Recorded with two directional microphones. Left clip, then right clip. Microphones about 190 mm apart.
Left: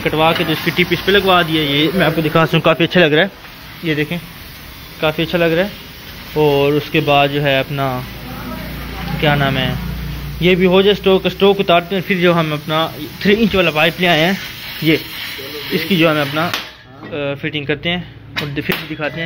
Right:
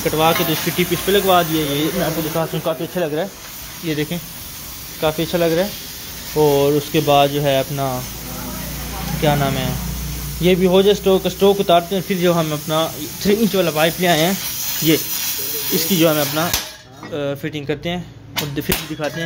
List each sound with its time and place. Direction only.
0.0 s speech: 10° right (ahead or behind)
2.0 s speech: 20° left (ahead or behind)
3.8 s speech: 10° right (ahead or behind)
9.2 s speech: 10° right (ahead or behind); by 17.4 s 25° right (ahead or behind)
17.4 s speech: 15° right (ahead or behind)